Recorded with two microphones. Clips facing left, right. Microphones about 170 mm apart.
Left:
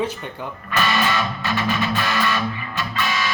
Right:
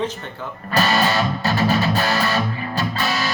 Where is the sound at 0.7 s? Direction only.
40° right (ahead or behind).